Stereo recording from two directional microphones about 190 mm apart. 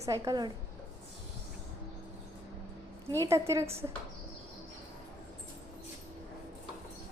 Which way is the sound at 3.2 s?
15° right (ahead or behind).